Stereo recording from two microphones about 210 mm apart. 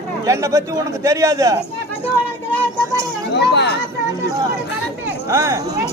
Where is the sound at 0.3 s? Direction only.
15° right (ahead or behind).